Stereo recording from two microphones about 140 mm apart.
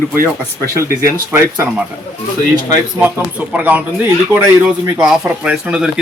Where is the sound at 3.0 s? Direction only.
10° right (ahead or behind).